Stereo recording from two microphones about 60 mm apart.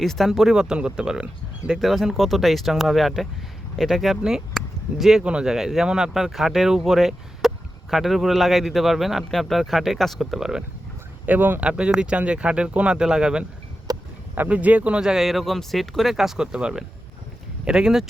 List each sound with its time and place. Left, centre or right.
0.0 s speech: centre
1.8 s speech: centre
4.2 s speech: centre
5.2 s speech: centre
11.3 s speech: right
11.6 s speech: centre
13.9 s a sound: right
14.3 s speech: right
15.0 s speech: centre